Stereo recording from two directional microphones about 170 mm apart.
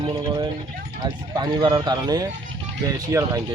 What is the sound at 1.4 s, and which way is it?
Speech, 25° right (ahead or behind).